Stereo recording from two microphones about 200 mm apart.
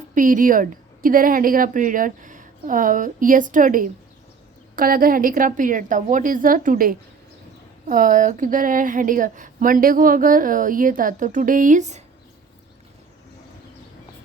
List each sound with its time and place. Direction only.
0.1 s speech: 40° right (ahead or behind)